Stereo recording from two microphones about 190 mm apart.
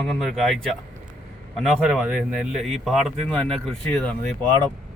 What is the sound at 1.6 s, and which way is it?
Speech, centre (ahead or behind).